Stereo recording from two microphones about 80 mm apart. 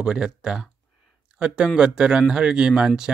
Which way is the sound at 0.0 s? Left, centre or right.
Centre.